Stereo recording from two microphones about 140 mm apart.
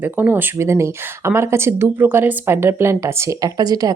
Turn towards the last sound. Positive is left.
turn(degrees=-30)  # may be behind; listen again after turning